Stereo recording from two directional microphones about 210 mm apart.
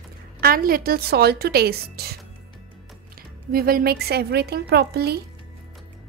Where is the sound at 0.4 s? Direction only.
45° right (ahead or behind).